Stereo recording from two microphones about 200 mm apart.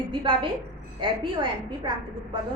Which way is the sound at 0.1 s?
25° right (ahead or behind).